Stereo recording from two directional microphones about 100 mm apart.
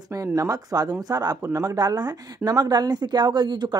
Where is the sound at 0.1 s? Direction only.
30° right (ahead or behind).